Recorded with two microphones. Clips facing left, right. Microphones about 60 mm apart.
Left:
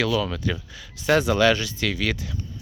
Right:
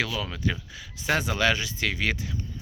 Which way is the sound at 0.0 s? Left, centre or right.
Centre.